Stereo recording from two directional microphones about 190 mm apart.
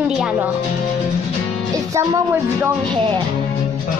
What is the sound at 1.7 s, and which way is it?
Music, 15° right (ahead or behind).